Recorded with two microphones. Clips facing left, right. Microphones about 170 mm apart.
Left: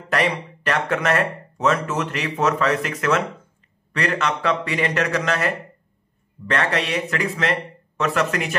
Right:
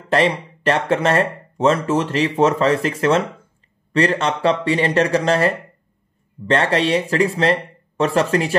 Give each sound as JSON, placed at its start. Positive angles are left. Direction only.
{"t": 0.1, "sound": "speech", "side_deg": -30}